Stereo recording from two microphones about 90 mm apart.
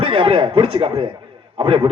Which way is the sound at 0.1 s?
90° right.